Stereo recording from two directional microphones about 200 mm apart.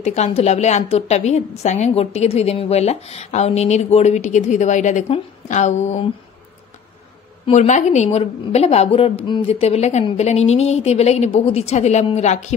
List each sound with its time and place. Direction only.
0.0 s a woman's voice: 35° left (ahead or behind)
7.4 s a woman's voice: 35° left (ahead or behind)